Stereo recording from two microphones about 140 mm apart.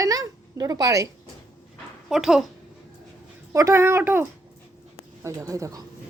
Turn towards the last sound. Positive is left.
turn(degrees=-25)  # may be behind; listen again after turning